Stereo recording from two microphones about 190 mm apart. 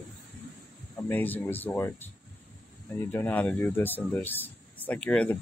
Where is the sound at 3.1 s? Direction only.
10° left (ahead or behind).